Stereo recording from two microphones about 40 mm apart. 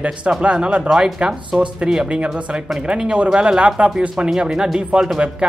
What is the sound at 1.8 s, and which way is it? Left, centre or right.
Speech, right.